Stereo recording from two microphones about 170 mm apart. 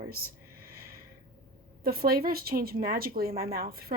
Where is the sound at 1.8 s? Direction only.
60° right (ahead or behind).